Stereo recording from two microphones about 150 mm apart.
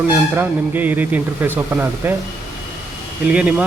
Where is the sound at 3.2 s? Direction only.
10° right (ahead or behind).